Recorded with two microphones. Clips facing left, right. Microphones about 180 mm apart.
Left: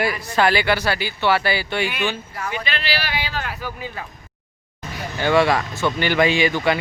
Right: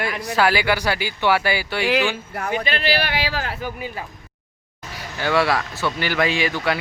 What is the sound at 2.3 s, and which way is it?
Speech, 50° right (ahead or behind).